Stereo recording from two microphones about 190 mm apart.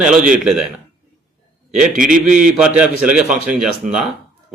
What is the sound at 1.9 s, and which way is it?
Speech, 45° right (ahead or behind).